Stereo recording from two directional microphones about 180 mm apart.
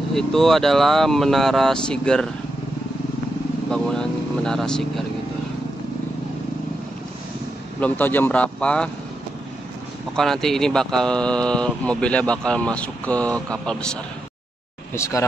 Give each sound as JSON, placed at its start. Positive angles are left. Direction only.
{"t": 0.1, "sound": "speech", "side_deg": 0}
{"t": 3.7, "sound": "vehicle", "side_deg": 5}
{"t": 7.8, "sound": "speech", "side_deg": 10}
{"t": 10.1, "sound": "speech", "side_deg": 0}
{"t": 15.0, "sound": "speech", "side_deg": 15}